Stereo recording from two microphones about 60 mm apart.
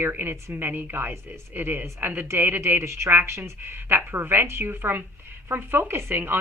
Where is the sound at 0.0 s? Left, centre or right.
Right.